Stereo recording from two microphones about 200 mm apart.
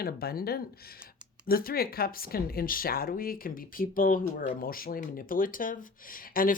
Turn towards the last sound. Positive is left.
turn(degrees=45)  # may be behind; listen again after turning